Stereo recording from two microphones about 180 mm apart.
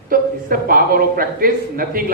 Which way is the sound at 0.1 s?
55° right (ahead or behind).